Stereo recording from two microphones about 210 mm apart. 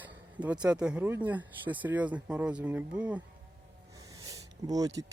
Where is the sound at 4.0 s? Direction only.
15° right (ahead or behind).